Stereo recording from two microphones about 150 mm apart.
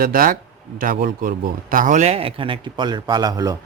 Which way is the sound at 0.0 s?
70° right (ahead or behind).